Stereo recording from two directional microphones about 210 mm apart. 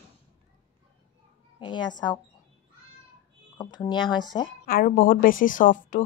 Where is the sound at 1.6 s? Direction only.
20° left (ahead or behind).